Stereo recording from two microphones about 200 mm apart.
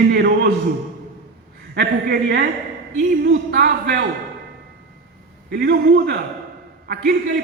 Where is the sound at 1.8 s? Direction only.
55° right (ahead or behind).